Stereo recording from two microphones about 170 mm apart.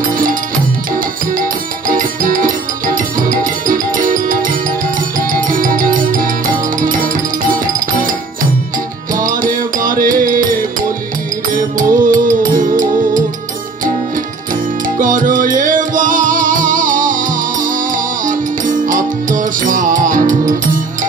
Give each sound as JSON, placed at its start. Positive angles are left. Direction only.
{"t": 0.1, "sound": "music", "side_deg": -55}
{"t": 1.9, "sound": "music", "side_deg": -55}
{"t": 15.0, "sound": "music", "side_deg": -50}